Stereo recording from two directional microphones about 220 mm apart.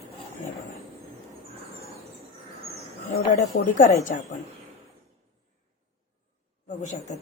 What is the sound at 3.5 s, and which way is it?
Speech, 75° left (ahead or behind).